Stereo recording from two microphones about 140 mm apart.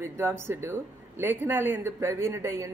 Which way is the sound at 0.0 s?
15° right (ahead or behind).